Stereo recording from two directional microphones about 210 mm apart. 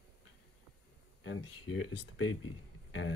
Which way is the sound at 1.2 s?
70° left (ahead or behind).